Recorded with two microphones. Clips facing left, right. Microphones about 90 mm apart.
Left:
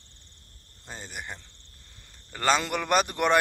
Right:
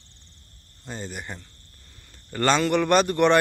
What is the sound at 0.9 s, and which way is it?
A man's voice, 5° left (ahead or behind).